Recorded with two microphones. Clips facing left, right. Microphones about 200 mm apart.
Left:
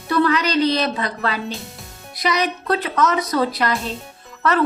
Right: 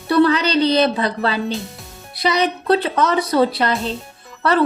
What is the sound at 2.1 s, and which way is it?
A woman's voice, 30° right (ahead or behind).